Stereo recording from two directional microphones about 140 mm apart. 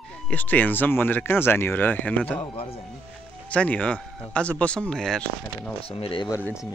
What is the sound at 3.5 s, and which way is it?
Speech, 10° left (ahead or behind).